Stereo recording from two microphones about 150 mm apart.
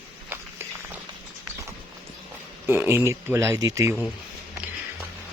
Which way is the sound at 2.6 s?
15° right (ahead or behind).